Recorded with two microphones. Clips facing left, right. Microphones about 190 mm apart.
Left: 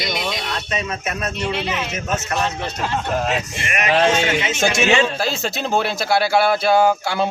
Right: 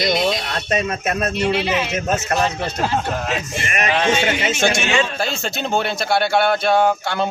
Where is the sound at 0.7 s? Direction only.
45° right (ahead or behind).